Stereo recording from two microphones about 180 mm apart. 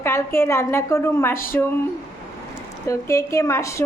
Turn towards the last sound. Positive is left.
turn(degrees=15)  # may be behind; listen again after turning